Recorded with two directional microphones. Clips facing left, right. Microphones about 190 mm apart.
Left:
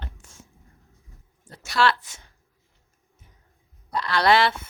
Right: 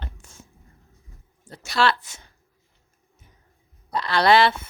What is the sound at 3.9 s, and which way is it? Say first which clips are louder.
Speech: right 2 dB; 25° right (ahead or behind).